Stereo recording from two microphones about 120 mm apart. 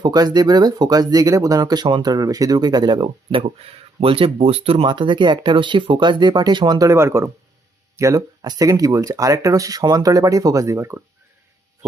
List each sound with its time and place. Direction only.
0.0 s speech: 35° right (ahead or behind)